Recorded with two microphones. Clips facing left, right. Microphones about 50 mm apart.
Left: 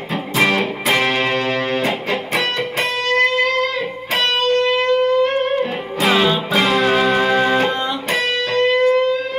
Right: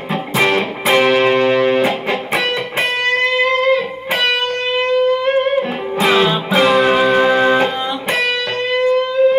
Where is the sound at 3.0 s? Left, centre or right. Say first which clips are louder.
Even; right.